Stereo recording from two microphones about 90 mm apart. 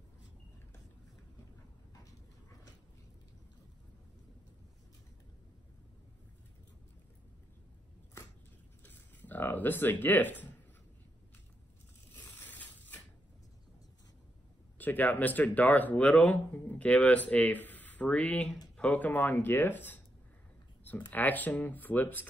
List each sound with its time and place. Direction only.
8.8 s a sound: 20° left (ahead or behind)
12.1 s mechanisms: 20° left (ahead or behind)
14.8 s speech: 20° left (ahead or behind)